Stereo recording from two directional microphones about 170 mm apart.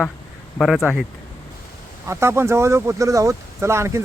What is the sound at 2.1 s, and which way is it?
Speech, 15° right (ahead or behind).